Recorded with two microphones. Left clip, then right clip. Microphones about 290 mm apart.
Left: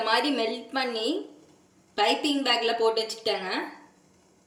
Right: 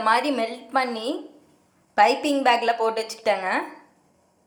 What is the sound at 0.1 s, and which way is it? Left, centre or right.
A woman's voice, centre.